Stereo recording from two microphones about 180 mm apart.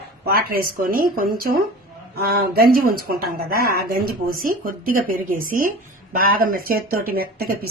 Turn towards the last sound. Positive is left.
turn(degrees=-55)  # may be behind; listen again after turning